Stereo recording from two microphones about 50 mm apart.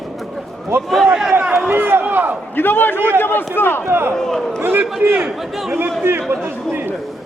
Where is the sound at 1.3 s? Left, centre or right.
Right.